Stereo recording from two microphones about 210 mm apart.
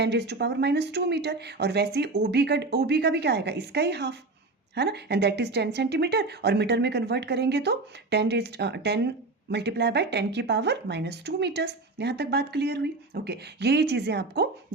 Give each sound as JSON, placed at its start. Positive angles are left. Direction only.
{"t": 0.0, "sound": "speech", "side_deg": -55}